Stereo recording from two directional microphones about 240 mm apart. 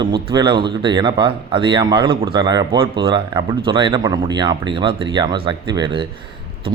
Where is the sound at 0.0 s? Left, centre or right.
Centre.